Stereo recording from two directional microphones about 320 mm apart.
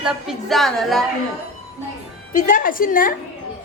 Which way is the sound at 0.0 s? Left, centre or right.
Centre.